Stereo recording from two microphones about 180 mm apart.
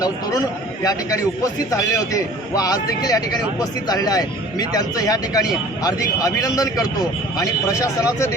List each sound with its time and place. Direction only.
0.0 s a man's voice: 20° left (ahead or behind)